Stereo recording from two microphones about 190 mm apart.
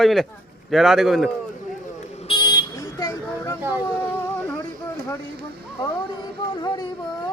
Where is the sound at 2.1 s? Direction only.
30° left (ahead or behind).